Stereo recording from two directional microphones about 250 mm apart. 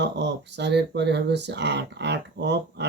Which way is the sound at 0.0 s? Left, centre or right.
Right.